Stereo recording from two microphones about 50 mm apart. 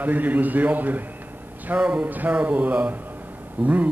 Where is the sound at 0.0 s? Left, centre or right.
Right.